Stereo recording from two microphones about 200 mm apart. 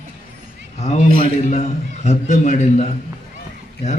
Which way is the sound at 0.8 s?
35° left (ahead or behind).